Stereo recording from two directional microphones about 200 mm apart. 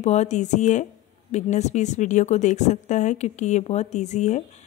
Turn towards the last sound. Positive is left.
turn(degrees=35)  # may be behind; listen again after turning